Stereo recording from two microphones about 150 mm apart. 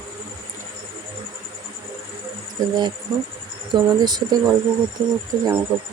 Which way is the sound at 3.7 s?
25° right (ahead or behind).